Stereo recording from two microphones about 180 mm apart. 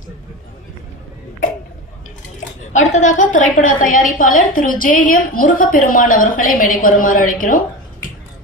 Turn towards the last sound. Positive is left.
turn(degrees=50)  # may be behind; listen again after turning